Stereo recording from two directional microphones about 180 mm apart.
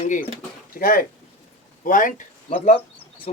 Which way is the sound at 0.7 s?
55° left (ahead or behind).